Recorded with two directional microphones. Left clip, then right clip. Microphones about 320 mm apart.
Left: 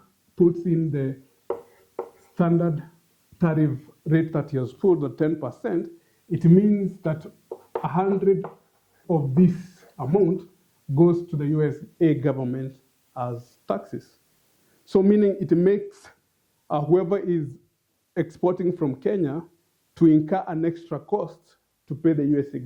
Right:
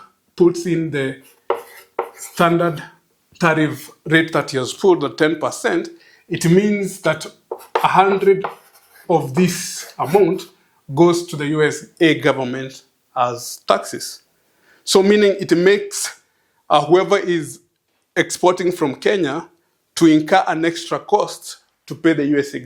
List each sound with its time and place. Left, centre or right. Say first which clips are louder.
0.0 s chopping: right 5 dB; centre
3.3 s speech: right 8 dB; centre
7.4 s a sound: right 8 dB; centre
7.7 s speech: right 11 dB; centre